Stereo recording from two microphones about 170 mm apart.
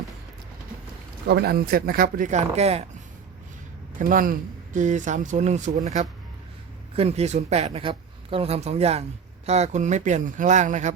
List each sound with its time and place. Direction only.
1.3 s speech: 70° right (ahead or behind); by 2.8 s 40° right (ahead or behind)
3.9 s a man's voice: 55° right (ahead or behind)